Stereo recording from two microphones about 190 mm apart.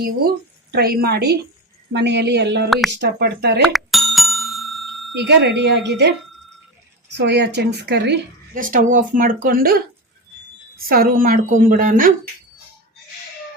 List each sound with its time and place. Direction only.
0.0 s a woman's voice: 55° right (ahead or behind)
2.6 s speech: centre (ahead or behind)
2.9 s a woman's voice: 60° right (ahead or behind)
3.7 s bicycle bell: centre (ahead or behind)
5.1 s a woman's voice: 65° right (ahead or behind)
8.5 s speech: 45° right (ahead or behind)
10.8 s speech: 50° right (ahead or behind)